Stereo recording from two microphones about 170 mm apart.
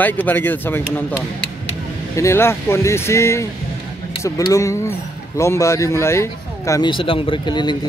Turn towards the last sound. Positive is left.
turn(degrees=25)  # may be behind; listen again after turning